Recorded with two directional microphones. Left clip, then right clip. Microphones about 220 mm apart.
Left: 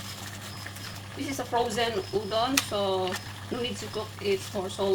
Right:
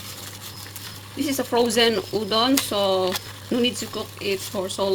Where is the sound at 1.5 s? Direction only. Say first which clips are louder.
Right 8 dB; 45° right (ahead or behind).